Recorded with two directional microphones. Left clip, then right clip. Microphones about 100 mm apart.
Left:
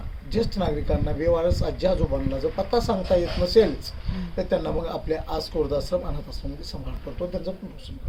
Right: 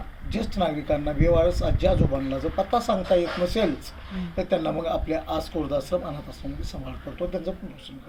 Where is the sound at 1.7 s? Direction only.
40° left (ahead or behind).